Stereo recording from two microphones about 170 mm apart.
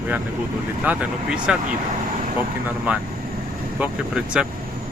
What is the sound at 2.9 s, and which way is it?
Speech, 10° right (ahead or behind).